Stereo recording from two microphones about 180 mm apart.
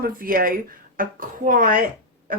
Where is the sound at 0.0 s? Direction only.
50° right (ahead or behind).